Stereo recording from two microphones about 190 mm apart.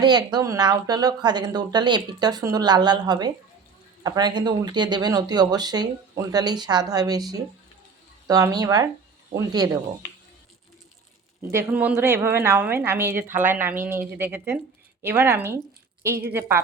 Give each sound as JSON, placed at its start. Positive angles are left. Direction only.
{"t": 0.0, "sound": "speech", "side_deg": -20}
{"t": 11.5, "sound": "a woman's voice", "side_deg": -10}